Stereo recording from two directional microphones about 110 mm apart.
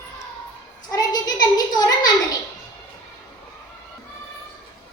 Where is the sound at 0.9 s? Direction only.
35° left (ahead or behind).